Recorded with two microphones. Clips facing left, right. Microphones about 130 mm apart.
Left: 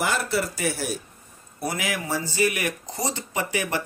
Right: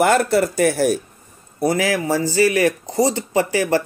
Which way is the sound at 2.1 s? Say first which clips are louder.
Right 9 dB; 90° right.